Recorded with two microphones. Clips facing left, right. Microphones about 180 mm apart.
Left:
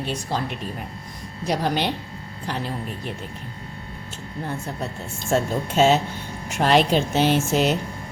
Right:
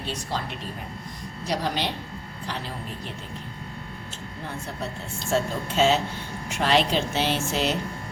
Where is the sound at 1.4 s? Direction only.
55° left (ahead or behind).